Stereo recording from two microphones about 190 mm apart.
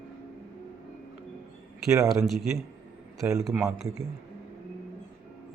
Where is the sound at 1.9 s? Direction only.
15° right (ahead or behind).